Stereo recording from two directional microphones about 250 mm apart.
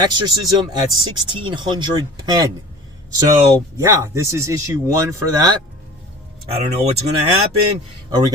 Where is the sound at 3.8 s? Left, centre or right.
Centre.